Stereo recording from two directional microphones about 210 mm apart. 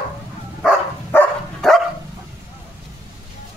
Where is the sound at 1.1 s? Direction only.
Centre (ahead or behind).